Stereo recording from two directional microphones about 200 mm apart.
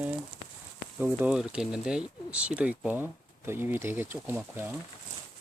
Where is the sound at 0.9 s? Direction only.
5° right (ahead or behind).